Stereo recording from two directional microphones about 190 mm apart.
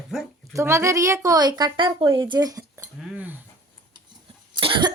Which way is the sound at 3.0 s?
5° right (ahead or behind).